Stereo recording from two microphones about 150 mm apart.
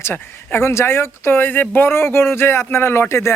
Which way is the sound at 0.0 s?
15° left (ahead or behind).